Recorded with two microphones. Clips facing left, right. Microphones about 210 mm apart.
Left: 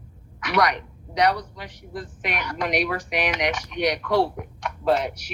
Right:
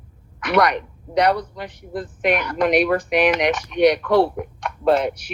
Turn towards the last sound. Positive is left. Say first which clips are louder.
# right 4 dB
turn(degrees=-60)  # may be behind; listen again after turning